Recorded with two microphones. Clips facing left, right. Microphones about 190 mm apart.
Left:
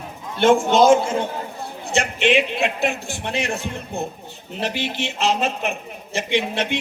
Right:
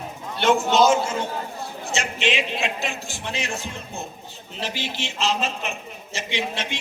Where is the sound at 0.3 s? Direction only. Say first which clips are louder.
Left 4 dB; 50° left (ahead or behind).